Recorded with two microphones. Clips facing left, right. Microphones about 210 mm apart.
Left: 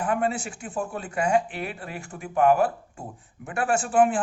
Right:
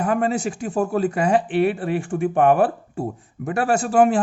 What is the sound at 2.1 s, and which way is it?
Speech, 55° right (ahead or behind).